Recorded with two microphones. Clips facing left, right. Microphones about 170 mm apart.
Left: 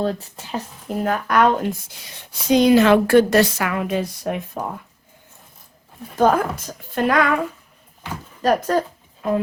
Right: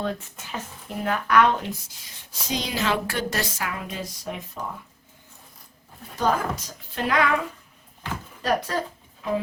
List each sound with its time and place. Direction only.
0.0 s speech: 35° left (ahead or behind); by 4.7 s 60° left (ahead or behind)
6.1 s speech: 55° left (ahead or behind)